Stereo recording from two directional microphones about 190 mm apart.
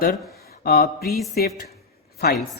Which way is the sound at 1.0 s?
Centre (ahead or behind).